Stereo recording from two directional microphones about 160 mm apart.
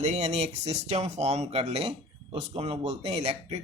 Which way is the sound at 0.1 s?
45° right (ahead or behind).